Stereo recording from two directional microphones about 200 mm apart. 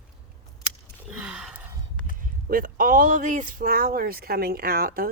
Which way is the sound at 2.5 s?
45° right (ahead or behind).